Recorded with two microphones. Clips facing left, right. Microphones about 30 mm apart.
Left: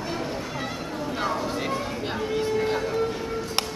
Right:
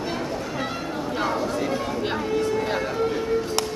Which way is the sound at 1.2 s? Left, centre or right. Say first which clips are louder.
Right 2 dB; centre.